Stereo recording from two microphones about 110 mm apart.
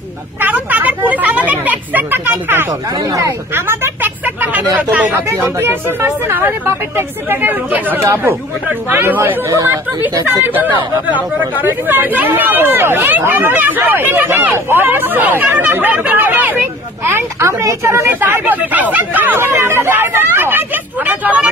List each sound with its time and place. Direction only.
0.4 s speech: 15° right (ahead or behind)
3.1 s speech: 30° right (ahead or behind)
10.5 s speech: 15° right (ahead or behind)